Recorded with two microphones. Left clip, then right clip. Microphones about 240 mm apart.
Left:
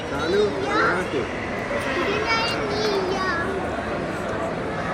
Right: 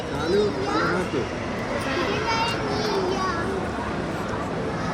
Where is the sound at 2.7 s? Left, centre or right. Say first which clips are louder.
Left 2 dB; centre.